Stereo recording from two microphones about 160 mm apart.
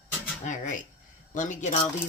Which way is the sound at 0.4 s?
50° left (ahead or behind).